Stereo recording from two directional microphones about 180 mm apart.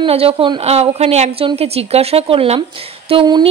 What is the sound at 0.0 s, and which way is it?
A woman's voice, 30° right (ahead or behind).